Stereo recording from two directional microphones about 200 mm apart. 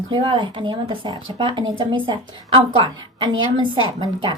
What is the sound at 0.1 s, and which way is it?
Speech, 25° right (ahead or behind).